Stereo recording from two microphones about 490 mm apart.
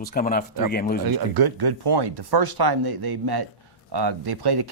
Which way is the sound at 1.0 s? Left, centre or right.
Right.